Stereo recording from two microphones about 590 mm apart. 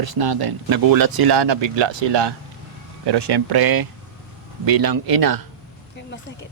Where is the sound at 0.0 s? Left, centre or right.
Right.